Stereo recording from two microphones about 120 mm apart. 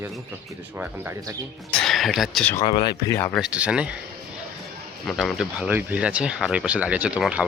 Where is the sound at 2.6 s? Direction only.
45° left (ahead or behind).